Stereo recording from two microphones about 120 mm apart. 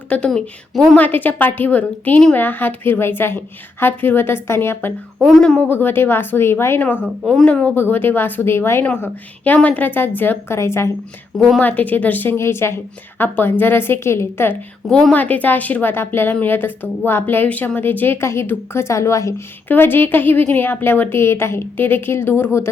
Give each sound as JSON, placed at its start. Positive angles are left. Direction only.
{"t": 0.1, "sound": "a woman's voice", "side_deg": 5}
{"t": 0.9, "sound": "a woman's voice", "side_deg": 15}
{"t": 5.2, "sound": "a woman's voice", "side_deg": 0}
{"t": 7.3, "sound": "a woman's voice", "side_deg": 5}
{"t": 11.3, "sound": "a woman's voice", "side_deg": 0}
{"t": 11.6, "sound": "a woman's voice", "side_deg": 15}
{"t": 14.8, "sound": "a woman's voice", "side_deg": 5}
{"t": 19.6, "sound": "a woman's voice", "side_deg": 15}